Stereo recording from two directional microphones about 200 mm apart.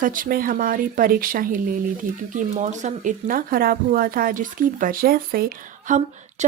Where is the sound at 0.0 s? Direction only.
45° right (ahead or behind).